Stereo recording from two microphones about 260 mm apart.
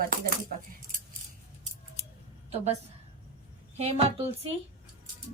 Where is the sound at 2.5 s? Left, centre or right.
Right.